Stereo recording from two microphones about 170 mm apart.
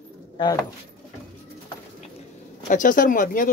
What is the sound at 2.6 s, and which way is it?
Speech, 50° left (ahead or behind).